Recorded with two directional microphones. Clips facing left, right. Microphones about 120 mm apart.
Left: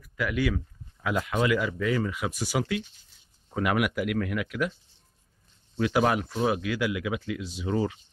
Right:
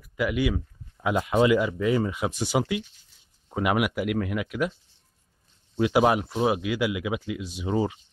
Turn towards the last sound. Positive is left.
turn(degrees=-15)  # may be behind; listen again after turning